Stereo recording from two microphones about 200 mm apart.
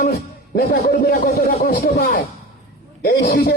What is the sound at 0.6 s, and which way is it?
Speech, 50° left (ahead or behind).